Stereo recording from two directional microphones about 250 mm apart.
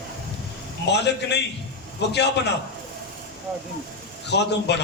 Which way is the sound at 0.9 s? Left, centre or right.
Left.